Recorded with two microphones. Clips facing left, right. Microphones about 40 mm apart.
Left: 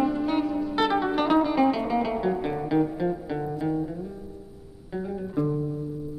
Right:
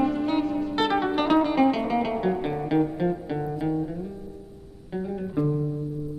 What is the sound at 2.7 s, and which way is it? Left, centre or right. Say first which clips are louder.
Music: right 1 dB; right.